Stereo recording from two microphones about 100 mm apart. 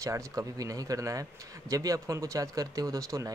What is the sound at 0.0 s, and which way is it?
A man's voice, 30° right (ahead or behind).